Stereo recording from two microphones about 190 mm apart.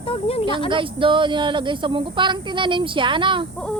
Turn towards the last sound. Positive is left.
turn(degrees=-25)  # may be behind; listen again after turning